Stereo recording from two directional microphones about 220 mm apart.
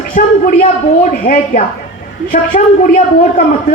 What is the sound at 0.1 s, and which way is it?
A man's voice, 35° left (ahead or behind).